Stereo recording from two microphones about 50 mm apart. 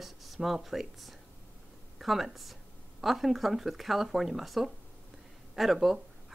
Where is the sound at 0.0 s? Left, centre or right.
Centre.